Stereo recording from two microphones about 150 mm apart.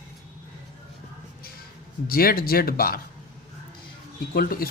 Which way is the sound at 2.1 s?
80° left.